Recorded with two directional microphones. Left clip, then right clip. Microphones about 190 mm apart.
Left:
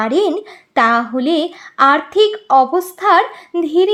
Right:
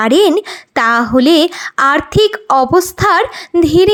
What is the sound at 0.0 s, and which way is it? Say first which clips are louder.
Speech: right 6 dB; 25° right (ahead or behind).